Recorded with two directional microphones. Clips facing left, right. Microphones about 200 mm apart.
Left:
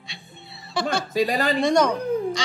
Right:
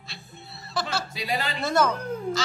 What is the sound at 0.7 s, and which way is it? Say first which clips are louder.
Speech: left 5 dB; centre (ahead or behind).